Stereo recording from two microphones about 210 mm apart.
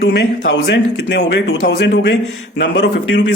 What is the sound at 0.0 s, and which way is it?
A man's voice, 55° left (ahead or behind).